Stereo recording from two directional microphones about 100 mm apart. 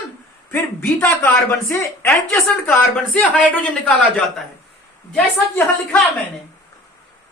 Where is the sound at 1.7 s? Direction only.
30° left (ahead or behind).